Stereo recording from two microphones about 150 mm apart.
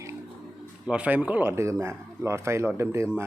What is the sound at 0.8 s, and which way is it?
Speech, 5° right (ahead or behind).